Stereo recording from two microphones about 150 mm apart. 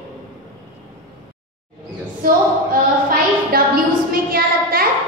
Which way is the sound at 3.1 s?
75° right (ahead or behind).